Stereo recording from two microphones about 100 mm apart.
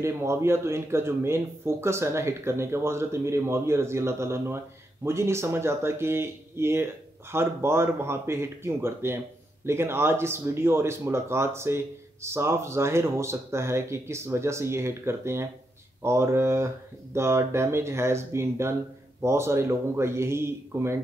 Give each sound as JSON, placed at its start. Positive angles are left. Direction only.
{"t": 0.0, "sound": "speech", "side_deg": -25}